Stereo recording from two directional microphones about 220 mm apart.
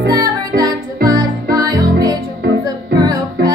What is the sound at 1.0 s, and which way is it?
Music, 15° right (ahead or behind).